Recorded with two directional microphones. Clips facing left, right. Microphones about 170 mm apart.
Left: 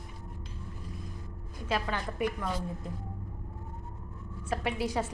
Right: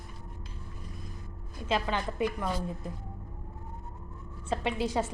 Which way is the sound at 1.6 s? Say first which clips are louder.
Right 2 dB; 20° right (ahead or behind).